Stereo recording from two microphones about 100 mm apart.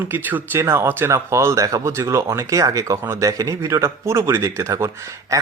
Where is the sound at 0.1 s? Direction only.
20° right (ahead or behind).